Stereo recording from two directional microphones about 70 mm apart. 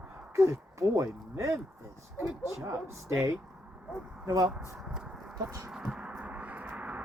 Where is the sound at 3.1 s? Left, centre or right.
Right.